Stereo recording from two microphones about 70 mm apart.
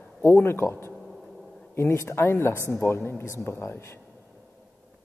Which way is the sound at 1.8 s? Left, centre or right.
Left.